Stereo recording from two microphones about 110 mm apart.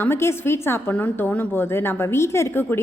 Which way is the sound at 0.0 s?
20° left (ahead or behind).